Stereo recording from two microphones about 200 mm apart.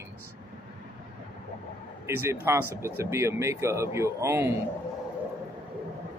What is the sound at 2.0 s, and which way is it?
Speech, 15° right (ahead or behind).